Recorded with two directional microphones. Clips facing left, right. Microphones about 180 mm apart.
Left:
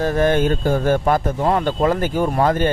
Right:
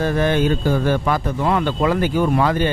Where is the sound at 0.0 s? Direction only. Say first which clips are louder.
Left 1 dB; 45° left (ahead or behind).